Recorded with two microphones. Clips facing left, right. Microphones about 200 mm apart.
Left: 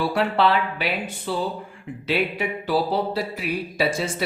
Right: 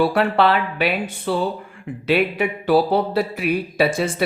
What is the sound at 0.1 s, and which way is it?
Speech, 60° right (ahead or behind).